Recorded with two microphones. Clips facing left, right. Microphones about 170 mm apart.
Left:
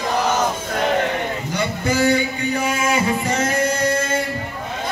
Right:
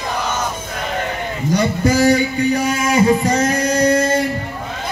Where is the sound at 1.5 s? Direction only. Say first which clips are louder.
Right 7 dB; 35° right (ahead or behind).